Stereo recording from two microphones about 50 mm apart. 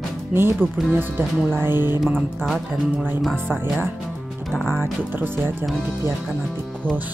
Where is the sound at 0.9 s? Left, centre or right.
Right.